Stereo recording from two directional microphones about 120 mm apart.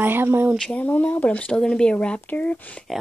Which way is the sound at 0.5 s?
10° left (ahead or behind).